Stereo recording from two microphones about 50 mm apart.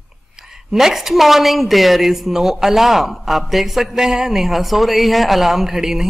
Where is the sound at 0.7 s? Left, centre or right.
Centre.